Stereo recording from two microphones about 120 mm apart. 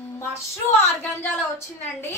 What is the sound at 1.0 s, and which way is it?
A woman's voice, 15° left (ahead or behind).